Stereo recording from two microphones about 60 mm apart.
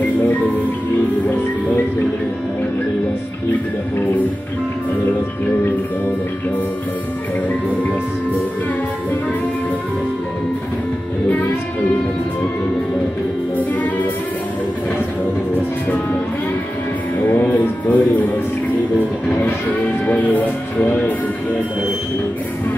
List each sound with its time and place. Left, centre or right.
17.2 s music: left
20.1 s music: left